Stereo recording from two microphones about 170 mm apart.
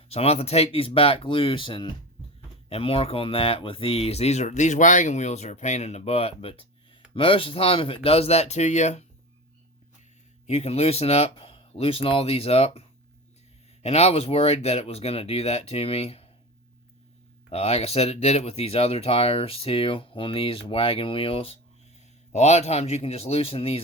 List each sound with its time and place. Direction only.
0.1 s speech: 35° left (ahead or behind)
10.4 s speech: 40° left (ahead or behind)
13.8 s speech: 40° left (ahead or behind)
17.5 s speech: 35° left (ahead or behind)